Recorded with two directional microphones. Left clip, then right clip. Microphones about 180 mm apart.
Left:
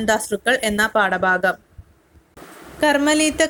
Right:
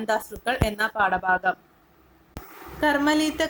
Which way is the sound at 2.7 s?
40° left (ahead or behind).